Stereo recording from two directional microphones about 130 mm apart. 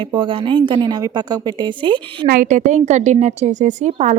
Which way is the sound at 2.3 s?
80° right.